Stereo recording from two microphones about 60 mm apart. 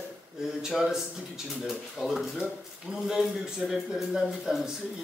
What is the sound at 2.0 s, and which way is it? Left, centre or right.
A man's voice, centre.